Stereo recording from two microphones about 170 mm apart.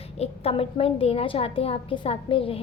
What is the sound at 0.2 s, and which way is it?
A woman's voice, 35° left (ahead or behind).